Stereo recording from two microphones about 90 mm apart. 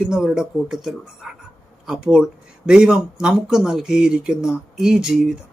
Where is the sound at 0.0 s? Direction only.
5° right (ahead or behind).